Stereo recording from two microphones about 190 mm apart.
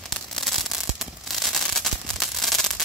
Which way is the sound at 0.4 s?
Centre (ahead or behind).